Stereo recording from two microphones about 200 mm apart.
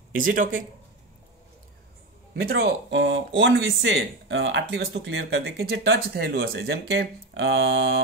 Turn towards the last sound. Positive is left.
turn(degrees=-55)  # may be behind; listen again after turning